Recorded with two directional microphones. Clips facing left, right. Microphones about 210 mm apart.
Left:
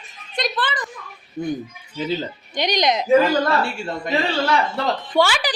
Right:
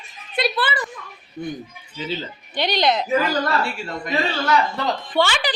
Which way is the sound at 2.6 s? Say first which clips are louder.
Even; 15° left (ahead or behind).